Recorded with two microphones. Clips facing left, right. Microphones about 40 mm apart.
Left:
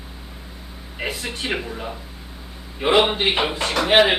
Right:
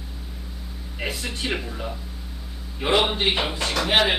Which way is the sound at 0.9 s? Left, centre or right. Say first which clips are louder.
Left 2 dB; centre.